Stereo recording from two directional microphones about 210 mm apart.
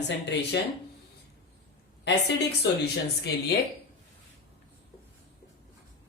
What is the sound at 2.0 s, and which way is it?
Speech, 55° left (ahead or behind).